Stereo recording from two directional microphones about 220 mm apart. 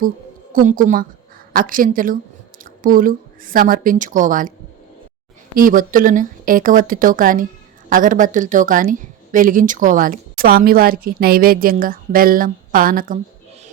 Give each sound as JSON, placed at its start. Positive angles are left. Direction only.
{"t": 0.5, "sound": "a woman's voice", "side_deg": -35}
{"t": 5.5, "sound": "a woman's voice", "side_deg": -40}